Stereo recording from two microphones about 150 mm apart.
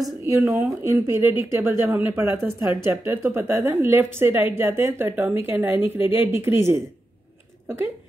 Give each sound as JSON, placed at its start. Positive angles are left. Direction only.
{"t": 0.0, "sound": "a woman's voice", "side_deg": -20}